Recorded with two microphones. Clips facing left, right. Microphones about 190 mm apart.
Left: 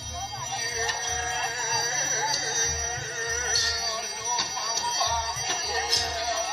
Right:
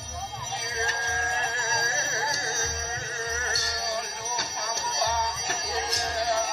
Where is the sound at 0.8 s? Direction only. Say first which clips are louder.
Right 1 dB; 55° right (ahead or behind).